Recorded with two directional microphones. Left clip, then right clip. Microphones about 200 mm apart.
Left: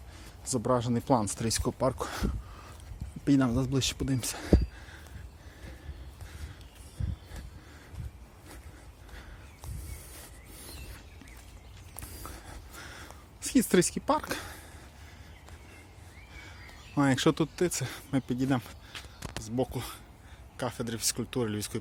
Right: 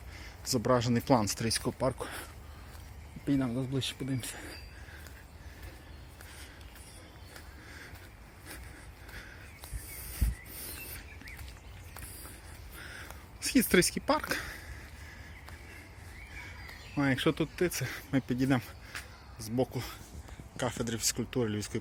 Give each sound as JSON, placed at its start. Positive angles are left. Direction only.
{"t": 0.5, "sound": "speech", "side_deg": 10}
{"t": 2.0, "sound": "speech", "side_deg": 30}
{"t": 3.2, "sound": "speech", "side_deg": 45}
{"t": 12.7, "sound": "a sound", "side_deg": 25}
{"t": 16.9, "sound": "speech", "side_deg": 30}
{"t": 17.7, "sound": "speech", "side_deg": 20}